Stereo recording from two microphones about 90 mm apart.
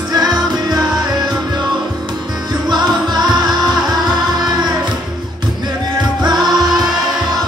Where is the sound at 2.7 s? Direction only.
50° right (ahead or behind).